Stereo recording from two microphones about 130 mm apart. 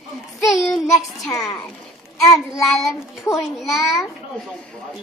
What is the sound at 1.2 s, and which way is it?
Speech, centre (ahead or behind).